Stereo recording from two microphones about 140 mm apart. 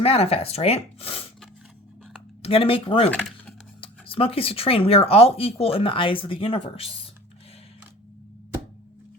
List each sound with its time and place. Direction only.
0.0 s speech: 45° left (ahead or behind)
2.4 s speech: 40° left (ahead or behind)